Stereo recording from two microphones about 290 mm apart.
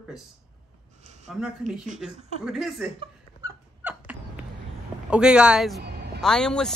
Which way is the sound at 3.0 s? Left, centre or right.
Centre.